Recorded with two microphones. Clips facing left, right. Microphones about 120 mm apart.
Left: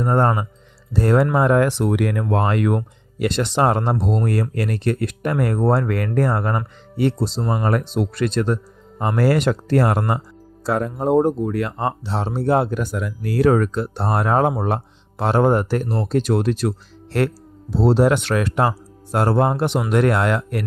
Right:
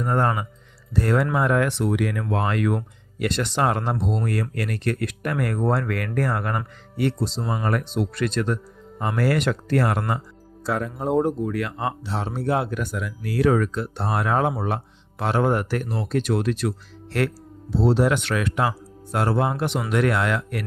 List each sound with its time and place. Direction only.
0.0 s speech: 30° left (ahead or behind)
1.9 s speech: 50° left (ahead or behind)